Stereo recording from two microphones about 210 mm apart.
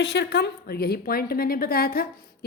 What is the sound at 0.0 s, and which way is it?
A woman's voice, 55° left (ahead or behind).